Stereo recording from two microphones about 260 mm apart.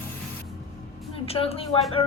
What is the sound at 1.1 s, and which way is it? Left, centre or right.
Speech, left.